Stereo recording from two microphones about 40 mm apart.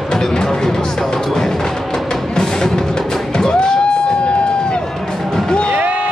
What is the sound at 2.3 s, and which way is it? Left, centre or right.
Music, centre.